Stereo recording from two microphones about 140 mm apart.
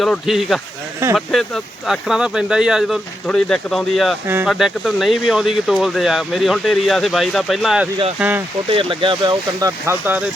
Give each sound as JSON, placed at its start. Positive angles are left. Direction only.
{"t": 0.0, "sound": "speech", "side_deg": 0}
{"t": 8.2, "sound": "speech", "side_deg": -10}
{"t": 8.7, "sound": "speech", "side_deg": -40}
{"t": 9.6, "sound": "speech", "side_deg": -20}